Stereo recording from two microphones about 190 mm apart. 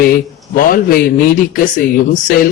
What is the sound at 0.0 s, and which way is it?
A man's voice, 50° left (ahead or behind).